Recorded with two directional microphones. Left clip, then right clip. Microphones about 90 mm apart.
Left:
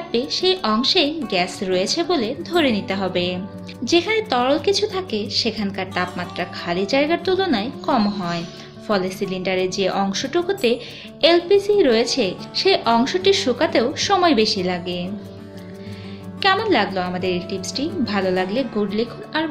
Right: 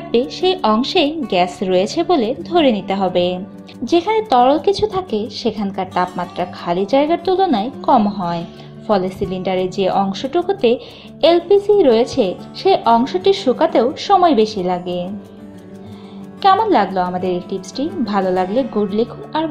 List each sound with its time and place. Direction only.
0.1 s a woman's voice: 65° right (ahead or behind); by 15.0 s 40° right (ahead or behind)
16.3 s a woman's voice: 35° right (ahead or behind)
19.3 s speech: 30° right (ahead or behind)